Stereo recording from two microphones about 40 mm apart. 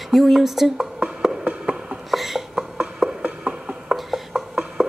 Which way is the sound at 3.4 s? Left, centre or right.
Right.